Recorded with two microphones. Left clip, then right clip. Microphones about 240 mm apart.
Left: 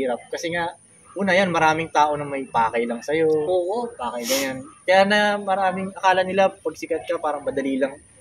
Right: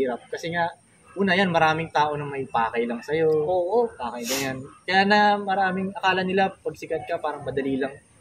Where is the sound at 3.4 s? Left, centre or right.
Centre.